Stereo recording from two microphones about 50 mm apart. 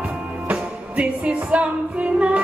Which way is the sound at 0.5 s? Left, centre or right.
Right.